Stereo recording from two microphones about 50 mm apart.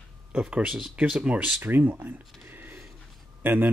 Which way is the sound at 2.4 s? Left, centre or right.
Right.